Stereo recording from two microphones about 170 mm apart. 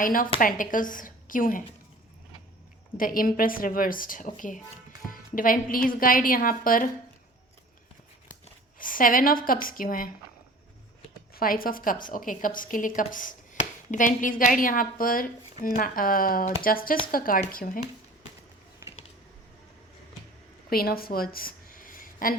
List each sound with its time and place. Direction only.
0.0 s a woman's voice: 55° left (ahead or behind)
3.0 s a woman's voice: 55° left (ahead or behind)
8.8 s a woman's voice: 55° left (ahead or behind)
11.3 s a woman's voice: 60° left (ahead or behind)
20.7 s a sound: 60° left (ahead or behind)